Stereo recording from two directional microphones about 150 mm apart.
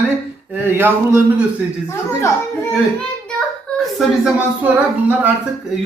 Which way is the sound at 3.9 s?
10° right (ahead or behind).